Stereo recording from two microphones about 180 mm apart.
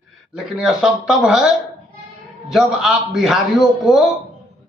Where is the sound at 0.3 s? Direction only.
5° right (ahead or behind).